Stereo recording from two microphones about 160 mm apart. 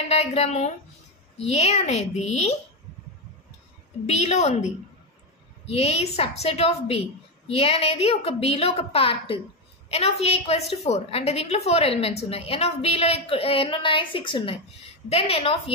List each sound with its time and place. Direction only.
0.1 s a woman's voice: 40° left (ahead or behind)
4.0 s a woman's voice: 45° left (ahead or behind)
5.7 s a woman's voice: 40° left (ahead or behind)